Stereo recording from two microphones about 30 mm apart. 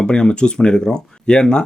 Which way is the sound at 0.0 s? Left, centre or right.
Left.